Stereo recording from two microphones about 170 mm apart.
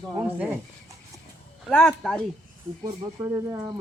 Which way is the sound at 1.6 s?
5° left (ahead or behind).